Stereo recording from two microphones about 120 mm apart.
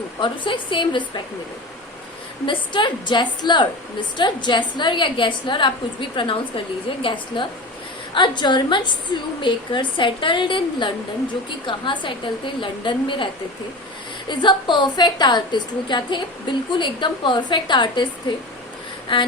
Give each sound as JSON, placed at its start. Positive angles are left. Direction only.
{"t": 0.2, "sound": "a woman's voice", "side_deg": 45}
{"t": 2.5, "sound": "a woman's voice", "side_deg": 40}
{"t": 14.3, "sound": "a woman's voice", "side_deg": 40}
{"t": 19.1, "sound": "a woman's voice", "side_deg": 45}